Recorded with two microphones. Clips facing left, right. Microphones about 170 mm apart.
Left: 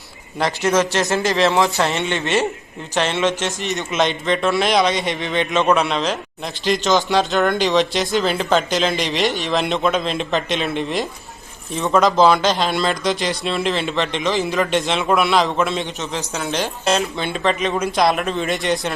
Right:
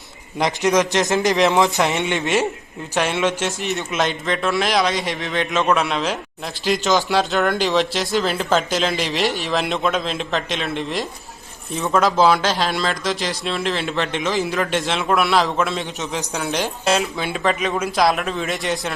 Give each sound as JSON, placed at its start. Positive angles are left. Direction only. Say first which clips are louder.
{"t": 0.3, "sound": "a man's voice", "louder": "even", "side_deg": -15}
{"t": 16.0, "sound": "speech", "louder": "even", "side_deg": -15}